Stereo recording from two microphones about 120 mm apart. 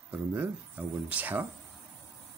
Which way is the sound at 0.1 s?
15° right (ahead or behind).